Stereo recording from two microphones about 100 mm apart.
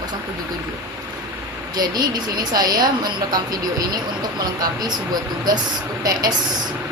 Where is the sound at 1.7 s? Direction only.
45° right (ahead or behind).